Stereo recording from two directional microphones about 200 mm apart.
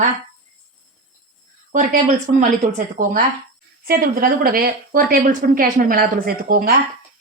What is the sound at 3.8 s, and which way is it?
Speech, 45° right (ahead or behind).